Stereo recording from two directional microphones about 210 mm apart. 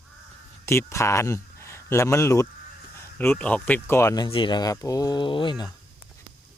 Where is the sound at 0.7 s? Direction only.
15° left (ahead or behind).